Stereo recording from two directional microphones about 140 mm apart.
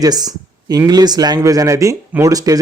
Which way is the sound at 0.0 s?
25° right (ahead or behind).